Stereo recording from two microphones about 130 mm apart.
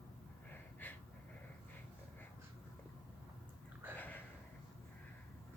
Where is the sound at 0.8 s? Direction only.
15° left (ahead or behind).